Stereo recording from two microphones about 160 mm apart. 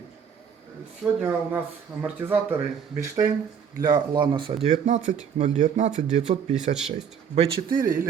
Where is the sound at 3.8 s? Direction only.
25° right (ahead or behind).